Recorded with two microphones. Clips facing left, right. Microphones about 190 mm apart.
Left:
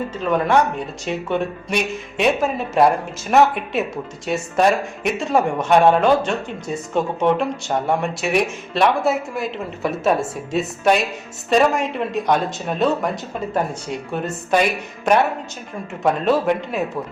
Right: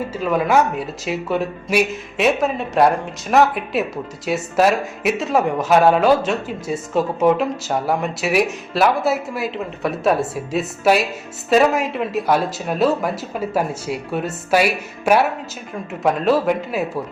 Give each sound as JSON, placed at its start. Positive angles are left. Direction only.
{"t": 0.1, "sound": "speech", "side_deg": -5}